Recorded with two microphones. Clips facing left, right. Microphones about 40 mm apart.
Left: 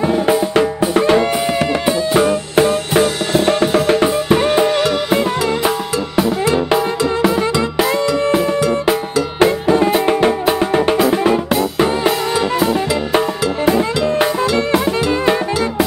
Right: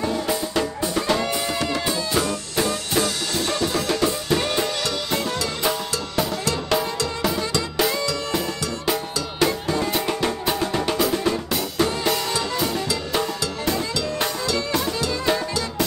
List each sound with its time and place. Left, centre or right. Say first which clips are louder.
0.0 s music: left 9 dB; left
6.1 s music: left 9 dB; left
9.4 s music: left 9 dB; left
11.0 s drum: left 8 dB; left